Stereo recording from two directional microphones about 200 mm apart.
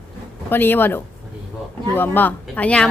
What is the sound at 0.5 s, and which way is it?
Speech, 10° left (ahead or behind).